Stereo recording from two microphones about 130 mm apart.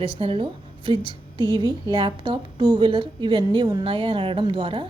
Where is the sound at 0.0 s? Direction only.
45° right (ahead or behind).